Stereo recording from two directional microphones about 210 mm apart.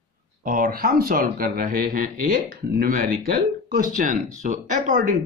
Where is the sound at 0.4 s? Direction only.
40° right (ahead or behind).